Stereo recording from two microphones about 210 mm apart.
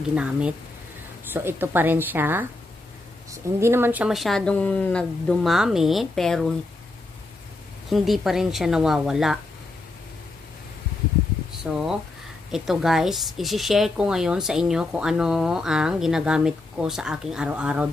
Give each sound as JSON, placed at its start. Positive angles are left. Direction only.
{"t": 0.1, "sound": "a woman's voice", "side_deg": -5}
{"t": 7.9, "sound": "a woman's voice", "side_deg": 0}
{"t": 11.6, "sound": "a woman's voice", "side_deg": 0}